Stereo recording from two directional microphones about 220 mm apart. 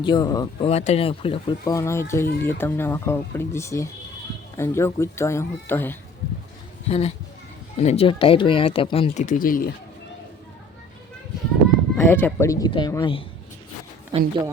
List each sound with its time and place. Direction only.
0.0 s speech: 20° left (ahead or behind)
0.7 s speech: 30° left (ahead or behind)
1.7 s speech: 10° left (ahead or behind)
6.8 s a child's voice: 30° left (ahead or behind)
11.9 s speech: 10° left (ahead or behind)
14.1 s speech: 25° right (ahead or behind)